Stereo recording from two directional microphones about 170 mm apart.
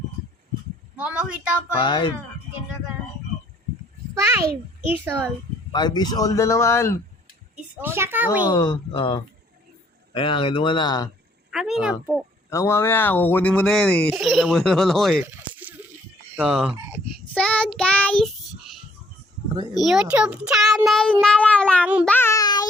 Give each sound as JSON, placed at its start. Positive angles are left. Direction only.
{"t": 0.9, "sound": "a woman's voice", "side_deg": -5}
{"t": 1.8, "sound": "speech", "side_deg": 25}
{"t": 4.1, "sound": "a child's voice", "side_deg": -15}
{"t": 5.7, "sound": "speech", "side_deg": 25}
{"t": 7.5, "sound": "a child's voice", "side_deg": -15}
{"t": 8.4, "sound": "speech", "side_deg": 25}
{"t": 11.5, "sound": "a woman's voice", "side_deg": 0}
{"t": 12.5, "sound": "speech", "side_deg": 15}
{"t": 15.3, "sound": "a sound", "side_deg": -10}
{"t": 16.3, "sound": "speech", "side_deg": -5}
{"t": 17.3, "sound": "speech", "side_deg": 5}
{"t": 19.7, "sound": "speech", "side_deg": 0}
{"t": 22.0, "sound": "child singing", "side_deg": 10}